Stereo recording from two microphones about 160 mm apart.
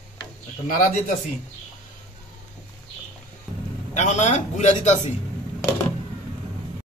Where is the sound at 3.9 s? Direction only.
45° left (ahead or behind).